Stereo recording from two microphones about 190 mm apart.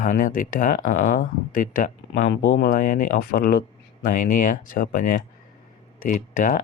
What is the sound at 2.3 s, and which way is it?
Speech, 70° left (ahead or behind).